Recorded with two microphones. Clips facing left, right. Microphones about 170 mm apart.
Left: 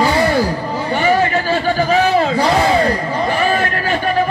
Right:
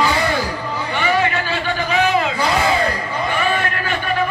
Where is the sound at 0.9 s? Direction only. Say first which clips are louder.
Left 4 dB; 40° left (ahead or behind).